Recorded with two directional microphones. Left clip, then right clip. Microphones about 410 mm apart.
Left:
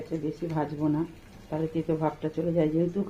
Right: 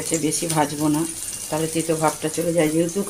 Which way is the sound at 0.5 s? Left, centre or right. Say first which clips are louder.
Right 7 dB; left.